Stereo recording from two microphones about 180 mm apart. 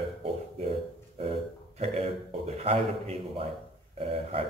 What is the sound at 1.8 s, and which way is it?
A man's voice, 30° right (ahead or behind).